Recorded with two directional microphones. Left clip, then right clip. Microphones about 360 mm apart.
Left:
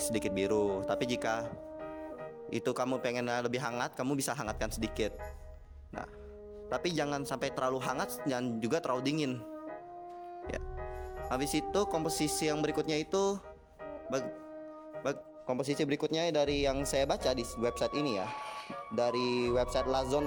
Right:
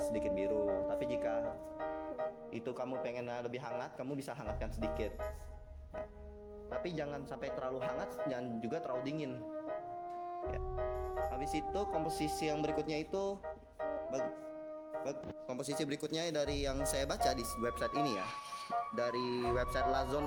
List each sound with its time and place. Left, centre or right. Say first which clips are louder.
0.1 s speech: left 3 dB; left
2.5 s speech: left 8 dB; left
6.7 s speech: left 7 dB; left
11.3 s speech: left 5 dB; left